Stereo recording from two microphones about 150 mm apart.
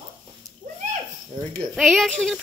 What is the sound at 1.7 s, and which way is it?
Speech, centre (ahead or behind).